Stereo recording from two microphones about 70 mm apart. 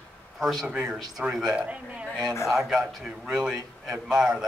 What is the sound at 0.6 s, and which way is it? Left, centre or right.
Speech, centre.